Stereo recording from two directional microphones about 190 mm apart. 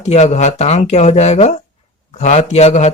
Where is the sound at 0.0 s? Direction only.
35° left (ahead or behind).